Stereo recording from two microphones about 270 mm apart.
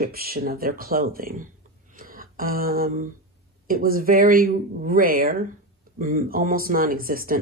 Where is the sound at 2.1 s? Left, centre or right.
Right.